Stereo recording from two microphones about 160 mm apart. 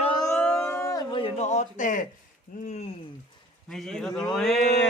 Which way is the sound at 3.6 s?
Centre (ahead or behind).